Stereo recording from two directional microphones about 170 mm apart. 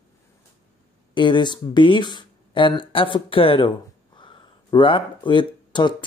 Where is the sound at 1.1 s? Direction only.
30° left (ahead or behind).